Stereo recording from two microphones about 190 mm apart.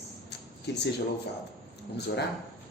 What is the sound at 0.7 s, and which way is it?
Speech, 65° left (ahead or behind).